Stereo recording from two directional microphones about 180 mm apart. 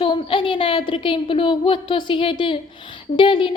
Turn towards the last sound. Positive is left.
turn(degrees=30)  # may be behind; listen again after turning